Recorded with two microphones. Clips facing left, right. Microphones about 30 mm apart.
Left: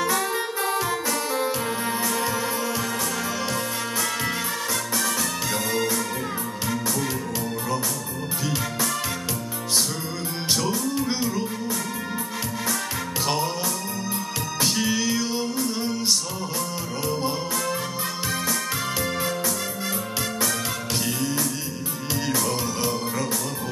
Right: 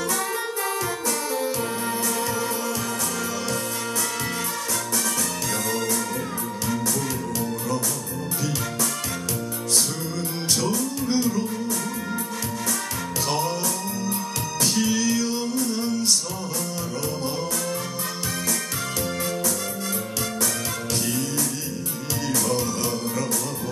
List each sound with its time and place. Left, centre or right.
1.3 s music: left
5.7 s music: centre
10.7 s music: centre
14.6 s music: centre